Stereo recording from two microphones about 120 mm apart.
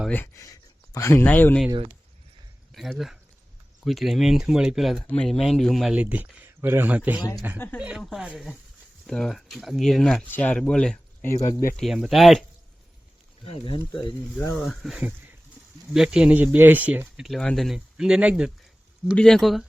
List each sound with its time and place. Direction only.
0.9 s speech: 25° left (ahead or behind)
2.7 s speech: centre (ahead or behind)
5.9 s speech: 10° right (ahead or behind)
13.4 s speech: 45° left (ahead or behind)
14.5 s speech: centre (ahead or behind)
17.2 s speech: 5° left (ahead or behind)
17.7 s speech: 5° right (ahead or behind)
19.1 s speech: 5° left (ahead or behind)